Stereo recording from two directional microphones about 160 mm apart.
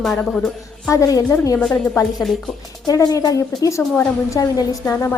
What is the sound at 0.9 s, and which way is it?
Speech, 20° left (ahead or behind).